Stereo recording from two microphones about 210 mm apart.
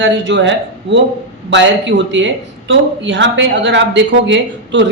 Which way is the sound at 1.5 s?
60° right (ahead or behind).